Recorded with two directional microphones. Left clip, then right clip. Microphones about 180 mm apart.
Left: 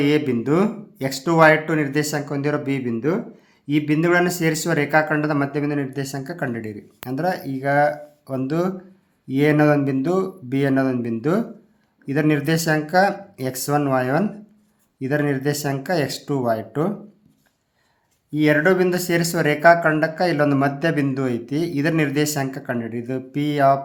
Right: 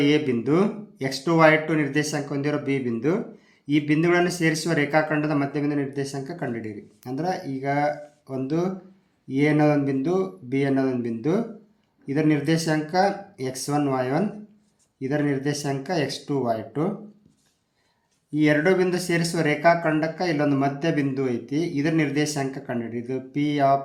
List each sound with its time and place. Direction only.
0.0 s speech: 25° left (ahead or behind)
18.3 s speech: 25° left (ahead or behind)